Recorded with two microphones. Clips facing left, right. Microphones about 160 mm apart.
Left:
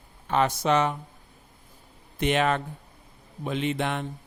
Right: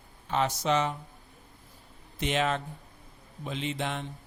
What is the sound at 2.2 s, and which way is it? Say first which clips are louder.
A man's voice: left 5 dB; 60° left (ahead or behind).